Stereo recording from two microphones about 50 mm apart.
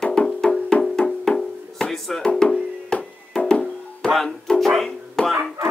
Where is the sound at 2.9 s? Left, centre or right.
Centre.